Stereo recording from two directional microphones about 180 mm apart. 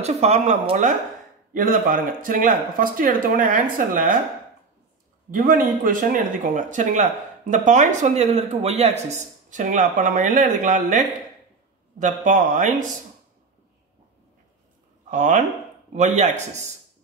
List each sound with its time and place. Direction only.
0.0 s speech: 40° right (ahead or behind)
5.3 s speech: 50° right (ahead or behind)
15.0 s speech: 45° right (ahead or behind)